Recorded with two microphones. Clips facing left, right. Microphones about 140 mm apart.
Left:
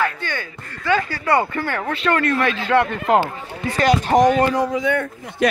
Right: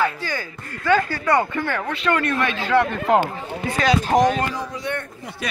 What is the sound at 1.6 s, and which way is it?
Speech, 35° left (ahead or behind).